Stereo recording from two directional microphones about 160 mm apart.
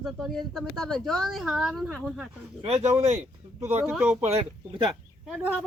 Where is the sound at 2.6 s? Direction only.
40° right (ahead or behind).